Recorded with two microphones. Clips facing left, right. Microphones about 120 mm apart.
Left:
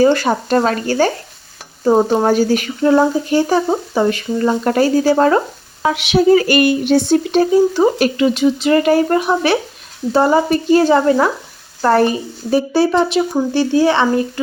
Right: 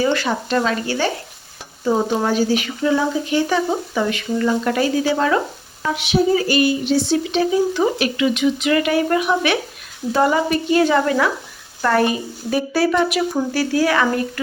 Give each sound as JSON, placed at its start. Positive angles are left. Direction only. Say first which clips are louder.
{"t": 0.0, "sound": "speech", "louder": "left 6 dB", "side_deg": 40}
{"t": 5.8, "sound": "a woman's voice", "louder": "left 5 dB", "side_deg": 80}